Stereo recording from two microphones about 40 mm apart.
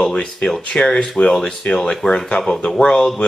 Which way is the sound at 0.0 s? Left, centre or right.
Left.